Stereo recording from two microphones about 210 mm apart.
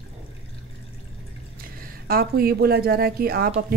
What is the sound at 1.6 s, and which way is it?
Speech, 45° right (ahead or behind).